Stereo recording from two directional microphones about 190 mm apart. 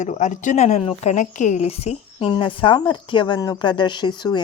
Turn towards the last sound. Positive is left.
turn(degrees=25)  # may be behind; listen again after turning